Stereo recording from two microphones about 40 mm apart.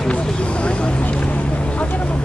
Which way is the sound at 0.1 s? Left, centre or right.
Left.